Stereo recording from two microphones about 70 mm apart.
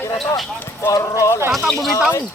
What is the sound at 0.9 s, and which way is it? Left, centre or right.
Speech, left.